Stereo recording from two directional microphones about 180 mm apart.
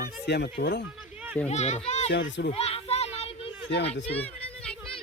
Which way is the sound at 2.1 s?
90° left.